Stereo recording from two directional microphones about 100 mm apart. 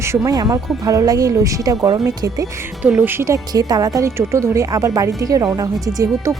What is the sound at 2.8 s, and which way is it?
Speech, 20° right (ahead or behind).